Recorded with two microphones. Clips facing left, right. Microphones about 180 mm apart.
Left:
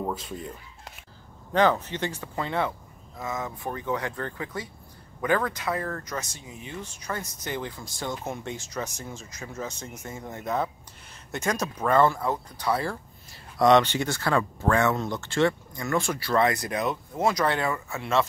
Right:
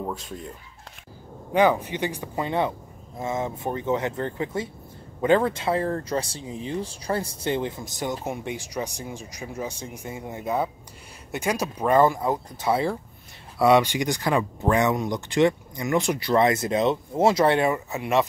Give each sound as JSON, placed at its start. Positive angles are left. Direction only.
{"t": 0.0, "sound": "speech", "side_deg": 0}
{"t": 1.5, "sound": "speech", "side_deg": -10}
{"t": 13.6, "sound": "speech", "side_deg": -10}